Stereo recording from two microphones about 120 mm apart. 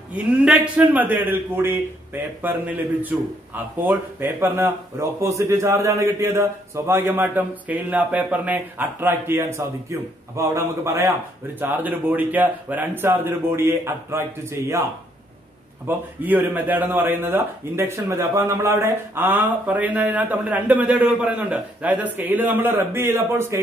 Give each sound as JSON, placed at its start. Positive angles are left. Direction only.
{"t": 0.1, "sound": "a man's voice", "side_deg": -10}
{"t": 15.9, "sound": "speech", "side_deg": -15}